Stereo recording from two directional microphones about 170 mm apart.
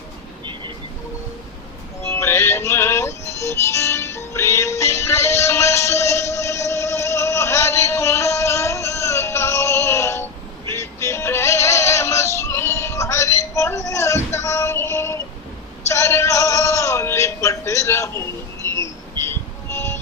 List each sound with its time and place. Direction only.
2.0 s music: 15° left (ahead or behind)
10.7 s synthetic singing: 15° left (ahead or behind)
15.9 s music: 15° left (ahead or behind)